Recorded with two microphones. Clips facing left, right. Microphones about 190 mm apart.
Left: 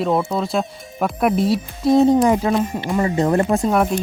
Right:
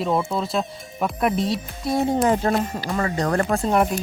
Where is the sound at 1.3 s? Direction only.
Centre (ahead or behind).